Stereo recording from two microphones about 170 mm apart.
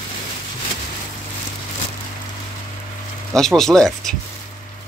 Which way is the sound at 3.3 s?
Centre (ahead or behind).